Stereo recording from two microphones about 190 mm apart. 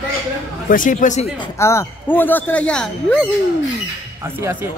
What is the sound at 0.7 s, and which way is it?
Speech, 45° left (ahead or behind).